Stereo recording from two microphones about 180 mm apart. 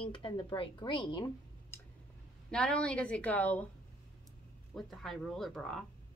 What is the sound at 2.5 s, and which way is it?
A woman's voice, 5° left (ahead or behind).